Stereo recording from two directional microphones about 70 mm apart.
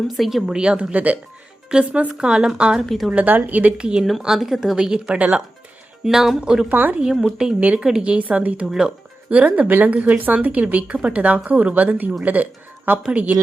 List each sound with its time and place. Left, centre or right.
0.2 s a woman's voice: centre
3.2 s speech: right
6.1 s speech: centre
6.7 s speech: right
7.0 s speech: centre